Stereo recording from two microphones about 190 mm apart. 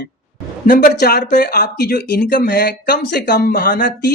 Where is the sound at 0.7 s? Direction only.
50° left (ahead or behind).